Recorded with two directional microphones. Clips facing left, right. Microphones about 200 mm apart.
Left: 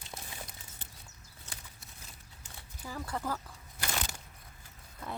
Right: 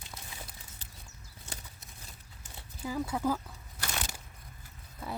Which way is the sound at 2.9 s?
10° right (ahead or behind).